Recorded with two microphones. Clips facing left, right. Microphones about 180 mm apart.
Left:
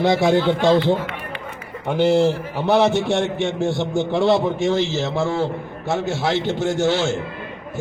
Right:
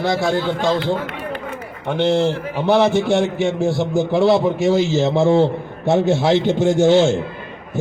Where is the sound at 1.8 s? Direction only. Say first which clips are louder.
Left 1 dB; 5° left (ahead or behind).